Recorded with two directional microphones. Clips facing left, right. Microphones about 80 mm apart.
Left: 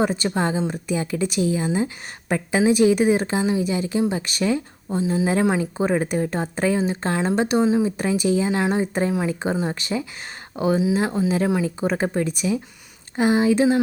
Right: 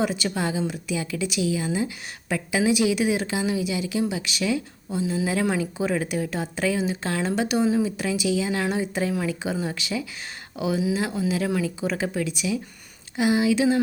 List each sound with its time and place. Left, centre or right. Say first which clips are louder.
0.0 s a woman's voice: left 4 dB; left
7.9 s a woman's voice: left 4 dB; left
11.4 s speech: left 3 dB; left
11.8 s a woman's voice: left 4 dB; left